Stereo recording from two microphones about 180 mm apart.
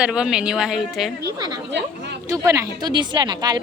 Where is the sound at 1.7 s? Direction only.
70° right (ahead or behind).